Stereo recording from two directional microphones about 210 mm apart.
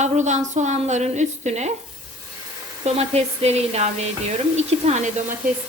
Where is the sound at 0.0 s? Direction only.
35° right (ahead or behind).